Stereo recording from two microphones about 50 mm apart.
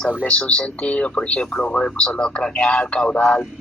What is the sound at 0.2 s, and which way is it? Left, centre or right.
Speech, left.